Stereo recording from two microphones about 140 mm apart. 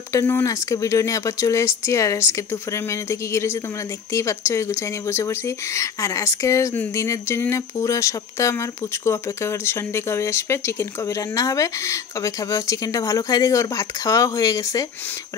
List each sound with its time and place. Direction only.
0.1 s speech: 20° left (ahead or behind)